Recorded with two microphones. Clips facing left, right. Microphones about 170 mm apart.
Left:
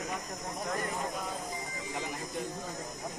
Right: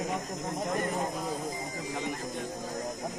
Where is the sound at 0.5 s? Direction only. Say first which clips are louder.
Right 4 dB; 20° right (ahead or behind).